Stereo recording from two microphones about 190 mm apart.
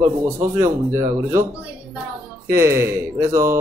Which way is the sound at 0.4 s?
15° right (ahead or behind).